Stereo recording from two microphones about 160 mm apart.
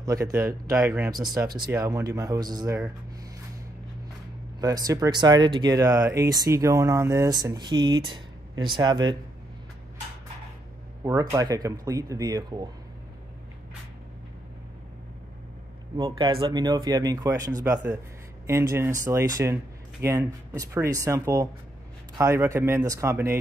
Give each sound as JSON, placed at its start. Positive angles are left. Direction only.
{"t": 0.0, "sound": "speech", "side_deg": -20}
{"t": 4.6, "sound": "speech", "side_deg": -25}
{"t": 11.1, "sound": "speech", "side_deg": -20}
{"t": 16.0, "sound": "speech", "side_deg": -30}